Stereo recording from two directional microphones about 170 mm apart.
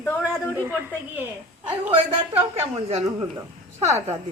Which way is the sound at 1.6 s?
10° right (ahead or behind).